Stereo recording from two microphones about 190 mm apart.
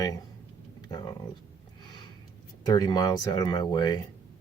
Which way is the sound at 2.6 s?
20° left (ahead or behind).